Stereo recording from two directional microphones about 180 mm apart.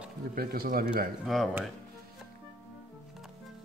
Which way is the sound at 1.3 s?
Centre (ahead or behind).